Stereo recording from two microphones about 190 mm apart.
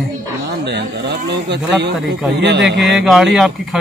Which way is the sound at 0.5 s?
65° right (ahead or behind).